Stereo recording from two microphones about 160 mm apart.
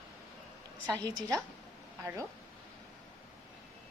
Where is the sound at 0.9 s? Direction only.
25° right (ahead or behind).